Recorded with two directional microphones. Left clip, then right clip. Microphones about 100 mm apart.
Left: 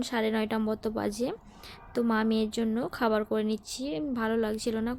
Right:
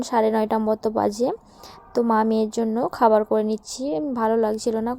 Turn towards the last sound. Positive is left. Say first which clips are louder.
# right 8 dB
turn(degrees=-30)  # may be behind; listen again after turning